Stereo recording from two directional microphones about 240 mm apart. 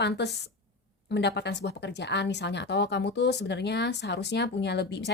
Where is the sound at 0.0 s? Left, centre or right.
Left.